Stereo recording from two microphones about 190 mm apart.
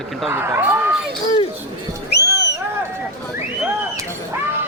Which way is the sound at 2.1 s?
60° left (ahead or behind).